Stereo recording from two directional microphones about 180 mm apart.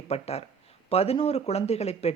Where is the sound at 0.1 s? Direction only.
35° left (ahead or behind).